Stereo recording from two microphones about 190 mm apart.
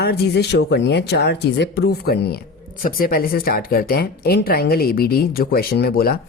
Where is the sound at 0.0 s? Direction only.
60° left (ahead or behind).